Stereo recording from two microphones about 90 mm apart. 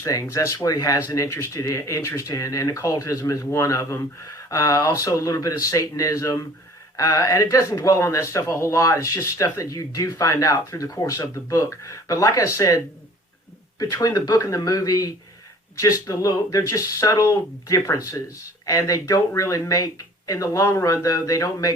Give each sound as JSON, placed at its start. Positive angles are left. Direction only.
{"t": 0.0, "sound": "speech", "side_deg": 35}